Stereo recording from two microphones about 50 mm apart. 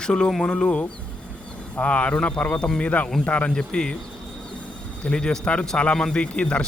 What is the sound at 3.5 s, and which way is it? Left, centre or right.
Speech, centre.